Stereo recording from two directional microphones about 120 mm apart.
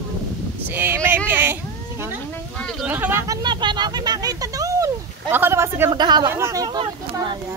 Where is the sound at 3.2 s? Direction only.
40° right (ahead or behind); by 5.9 s 25° right (ahead or behind).